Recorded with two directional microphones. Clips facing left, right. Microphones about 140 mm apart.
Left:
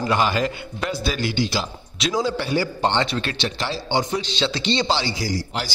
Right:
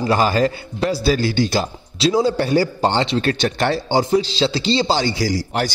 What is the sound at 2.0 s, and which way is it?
Speech, 30° right (ahead or behind).